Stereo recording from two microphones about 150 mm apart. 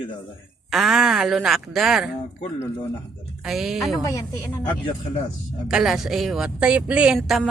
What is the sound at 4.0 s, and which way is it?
Speech, 20° left (ahead or behind).